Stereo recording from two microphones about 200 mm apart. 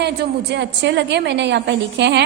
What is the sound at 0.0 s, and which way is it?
A woman's voice, 60° right (ahead or behind).